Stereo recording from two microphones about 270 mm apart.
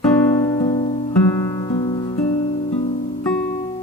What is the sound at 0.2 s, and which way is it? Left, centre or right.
Music, centre.